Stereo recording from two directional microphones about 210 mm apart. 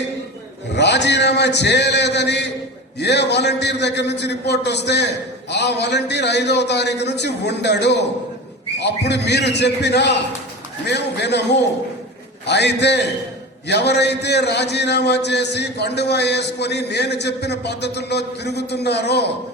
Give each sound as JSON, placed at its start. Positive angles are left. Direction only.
{"t": 0.8, "sound": "a man's voice", "side_deg": 55}